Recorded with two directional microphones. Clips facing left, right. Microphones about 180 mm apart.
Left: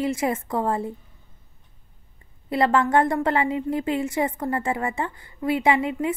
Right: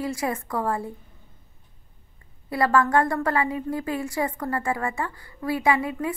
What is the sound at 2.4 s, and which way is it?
A woman's voice, 25° left (ahead or behind).